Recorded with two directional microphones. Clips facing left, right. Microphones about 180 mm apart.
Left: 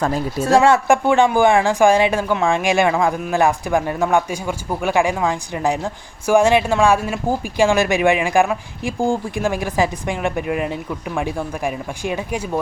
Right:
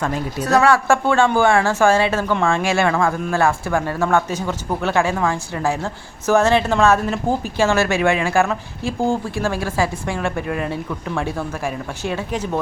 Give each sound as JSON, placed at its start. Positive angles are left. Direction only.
{"t": 0.0, "sound": "speech", "side_deg": 25}